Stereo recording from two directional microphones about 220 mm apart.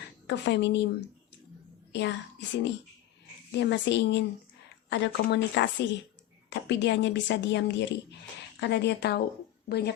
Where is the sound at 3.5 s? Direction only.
50° left (ahead or behind).